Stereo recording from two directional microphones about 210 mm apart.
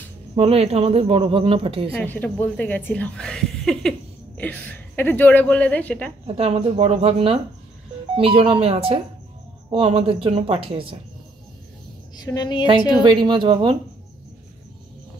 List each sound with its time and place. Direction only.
0.4 s speech: 30° right (ahead or behind)
2.0 s a woman's voice: 5° left (ahead or behind)
6.2 s speech: 30° right (ahead or behind)
12.3 s a woman's voice: 20° left (ahead or behind)
13.0 s speech: 20° right (ahead or behind)